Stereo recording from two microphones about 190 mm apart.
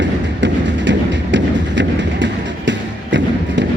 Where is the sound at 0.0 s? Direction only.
70° right (ahead or behind).